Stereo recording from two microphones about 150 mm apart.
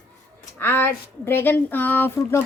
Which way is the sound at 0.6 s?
15° left (ahead or behind).